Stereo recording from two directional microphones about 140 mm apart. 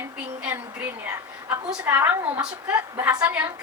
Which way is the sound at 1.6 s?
10° right (ahead or behind).